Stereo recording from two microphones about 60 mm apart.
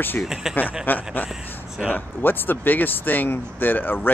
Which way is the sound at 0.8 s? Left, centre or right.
Left.